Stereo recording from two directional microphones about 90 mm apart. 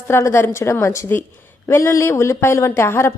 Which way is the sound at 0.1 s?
30° left (ahead or behind).